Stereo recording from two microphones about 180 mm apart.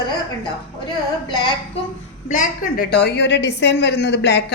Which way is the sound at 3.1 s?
70° left (ahead or behind).